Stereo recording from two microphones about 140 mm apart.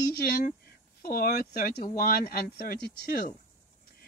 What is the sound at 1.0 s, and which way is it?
A man's voice, 90° left.